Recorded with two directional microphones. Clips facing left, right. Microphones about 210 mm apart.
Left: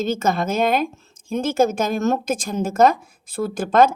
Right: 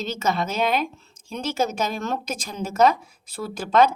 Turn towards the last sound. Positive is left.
turn(degrees=50)  # may be behind; listen again after turning